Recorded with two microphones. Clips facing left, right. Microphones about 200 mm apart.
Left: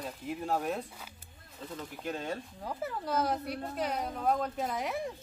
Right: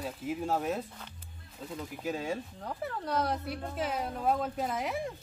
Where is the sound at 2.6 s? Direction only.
5° left (ahead or behind).